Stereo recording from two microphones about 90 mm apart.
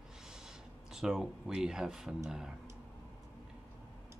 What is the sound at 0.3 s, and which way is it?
Speech, 5° right (ahead or behind).